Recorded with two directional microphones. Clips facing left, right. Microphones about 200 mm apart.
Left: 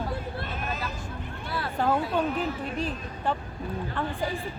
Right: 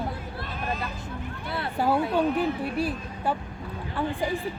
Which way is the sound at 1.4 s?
25° right (ahead or behind).